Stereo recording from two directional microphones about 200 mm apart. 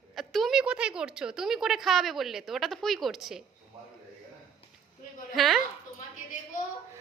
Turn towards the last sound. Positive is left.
turn(degrees=40)  # may be behind; listen again after turning